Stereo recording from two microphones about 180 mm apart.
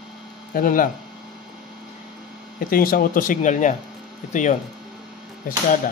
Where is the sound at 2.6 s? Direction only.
55° left (ahead or behind).